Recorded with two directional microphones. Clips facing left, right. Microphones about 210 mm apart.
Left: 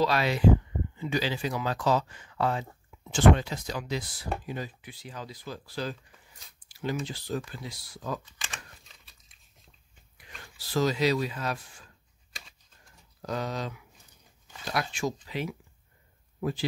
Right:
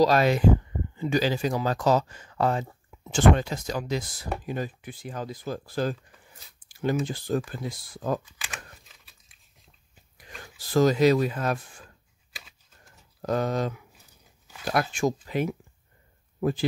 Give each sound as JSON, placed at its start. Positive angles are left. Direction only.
{"t": 0.0, "sound": "speech", "side_deg": -45}
{"t": 8.3, "sound": "a sound", "side_deg": -5}
{"t": 10.1, "sound": "speech", "side_deg": -45}
{"t": 12.3, "sound": "typing", "side_deg": -5}
{"t": 13.2, "sound": "speech", "side_deg": -50}